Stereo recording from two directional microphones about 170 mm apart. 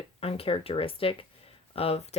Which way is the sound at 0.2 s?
35° left (ahead or behind).